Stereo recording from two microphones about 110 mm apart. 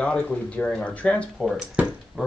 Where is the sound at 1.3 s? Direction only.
5° right (ahead or behind).